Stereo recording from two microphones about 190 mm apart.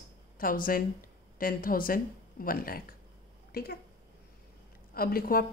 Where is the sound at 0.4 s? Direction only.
45° left (ahead or behind).